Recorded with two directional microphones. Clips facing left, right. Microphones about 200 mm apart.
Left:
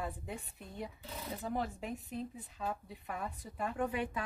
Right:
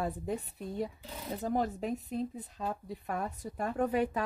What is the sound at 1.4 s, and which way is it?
A woman's voice, 40° right (ahead or behind).